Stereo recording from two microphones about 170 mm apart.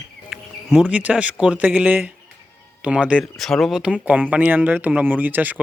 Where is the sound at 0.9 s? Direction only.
10° right (ahead or behind).